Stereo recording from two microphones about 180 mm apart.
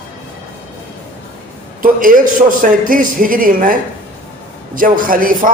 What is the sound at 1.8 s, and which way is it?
A man's voice, 50° right (ahead or behind).